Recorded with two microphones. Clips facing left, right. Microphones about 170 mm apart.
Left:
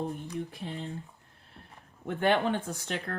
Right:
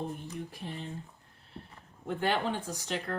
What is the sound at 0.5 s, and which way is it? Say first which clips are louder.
Speech: left 2 dB; 55° left (ahead or behind).